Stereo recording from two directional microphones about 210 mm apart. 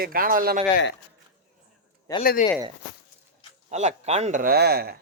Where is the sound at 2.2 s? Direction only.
45° left (ahead or behind).